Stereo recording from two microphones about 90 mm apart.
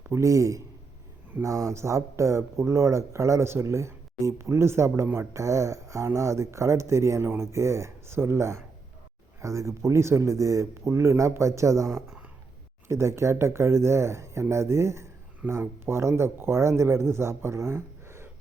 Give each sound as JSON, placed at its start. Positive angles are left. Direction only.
{"t": 0.1, "sound": "speech", "side_deg": -35}
{"t": 5.3, "sound": "speech", "side_deg": -35}